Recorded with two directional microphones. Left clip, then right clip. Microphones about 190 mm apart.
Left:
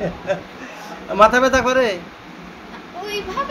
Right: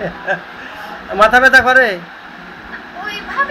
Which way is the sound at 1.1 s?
30° left (ahead or behind).